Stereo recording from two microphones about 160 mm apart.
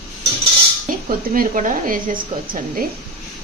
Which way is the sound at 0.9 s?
60° right (ahead or behind).